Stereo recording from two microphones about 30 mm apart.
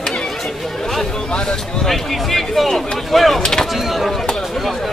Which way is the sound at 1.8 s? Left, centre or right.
Centre.